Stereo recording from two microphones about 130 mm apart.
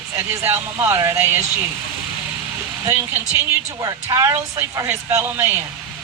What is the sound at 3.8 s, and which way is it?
Speech, 25° right (ahead or behind).